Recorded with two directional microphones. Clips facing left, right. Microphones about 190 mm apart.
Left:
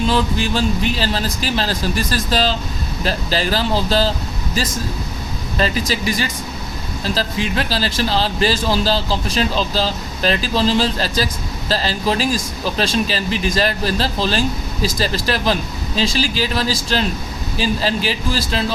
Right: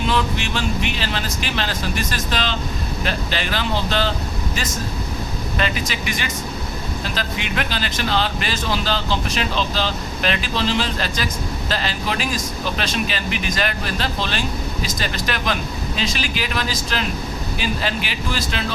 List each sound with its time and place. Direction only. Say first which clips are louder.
0.1 s speech: left 4 dB; 35° left (ahead or behind)
5.5 s speech: left 5 dB; 35° left (ahead or behind)